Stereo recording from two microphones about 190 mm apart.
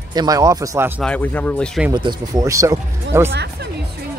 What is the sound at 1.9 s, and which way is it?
Speech, 20° right (ahead or behind).